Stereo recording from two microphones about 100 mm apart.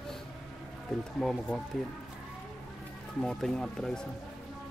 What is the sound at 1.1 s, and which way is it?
Speech, 5° left (ahead or behind).